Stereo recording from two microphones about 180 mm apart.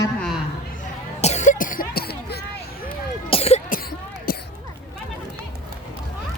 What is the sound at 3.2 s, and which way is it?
Cough, 30° left (ahead or behind).